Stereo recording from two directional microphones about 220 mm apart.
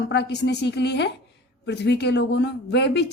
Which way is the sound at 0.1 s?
50° left (ahead or behind).